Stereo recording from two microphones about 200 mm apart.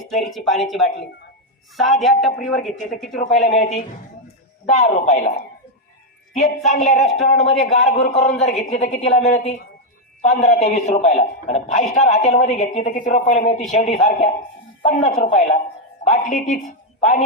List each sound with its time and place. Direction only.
0.3 s speech: centre (ahead or behind)
3.4 s a man's voice: 35° left (ahead or behind)
6.4 s a man's voice: 35° left (ahead or behind)